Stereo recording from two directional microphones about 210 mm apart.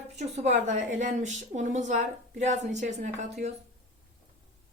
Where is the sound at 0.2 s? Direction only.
30° right (ahead or behind).